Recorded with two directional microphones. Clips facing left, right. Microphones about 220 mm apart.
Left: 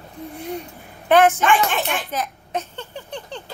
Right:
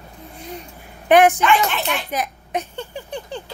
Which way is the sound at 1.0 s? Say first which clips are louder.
Right 2 dB; 15° right (ahead or behind).